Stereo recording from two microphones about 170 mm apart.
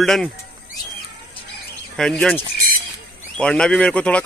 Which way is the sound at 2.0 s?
5° left (ahead or behind).